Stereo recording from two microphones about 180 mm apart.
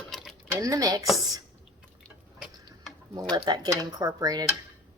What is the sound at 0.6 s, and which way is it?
Speech, 20° right (ahead or behind).